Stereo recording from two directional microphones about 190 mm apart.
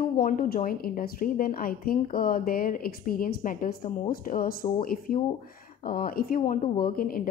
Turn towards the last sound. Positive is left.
turn(degrees=50)  # may be behind; listen again after turning